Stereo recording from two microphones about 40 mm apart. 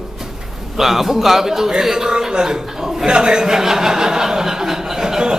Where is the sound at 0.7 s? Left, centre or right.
Centre.